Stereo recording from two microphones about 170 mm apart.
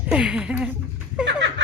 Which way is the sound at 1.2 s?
90° right.